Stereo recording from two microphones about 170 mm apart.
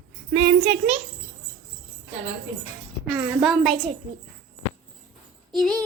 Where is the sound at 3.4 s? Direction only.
Centre (ahead or behind).